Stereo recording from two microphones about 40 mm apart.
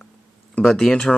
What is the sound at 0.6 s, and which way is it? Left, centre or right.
Speech, centre.